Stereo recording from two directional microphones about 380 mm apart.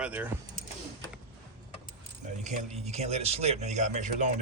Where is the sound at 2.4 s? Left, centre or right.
Centre.